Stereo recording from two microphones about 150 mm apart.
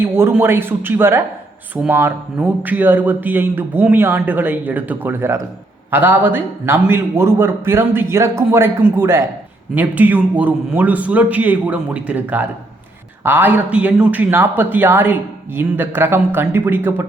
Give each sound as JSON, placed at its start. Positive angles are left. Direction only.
{"t": 0.0, "sound": "a man's voice", "side_deg": -15}